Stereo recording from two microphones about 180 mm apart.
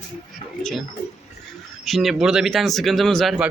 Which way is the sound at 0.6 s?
Centre (ahead or behind).